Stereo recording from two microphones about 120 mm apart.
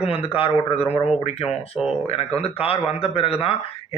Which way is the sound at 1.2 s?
55° left (ahead or behind).